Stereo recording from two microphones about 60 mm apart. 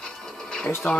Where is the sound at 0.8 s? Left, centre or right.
Left.